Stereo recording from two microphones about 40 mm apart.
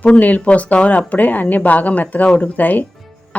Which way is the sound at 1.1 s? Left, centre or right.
Left.